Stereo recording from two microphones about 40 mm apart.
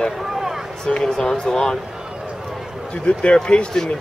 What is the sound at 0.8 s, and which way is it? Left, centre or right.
Speech, centre.